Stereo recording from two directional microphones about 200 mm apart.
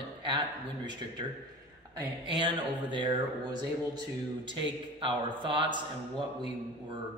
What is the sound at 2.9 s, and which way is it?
Speech, 20° right (ahead or behind).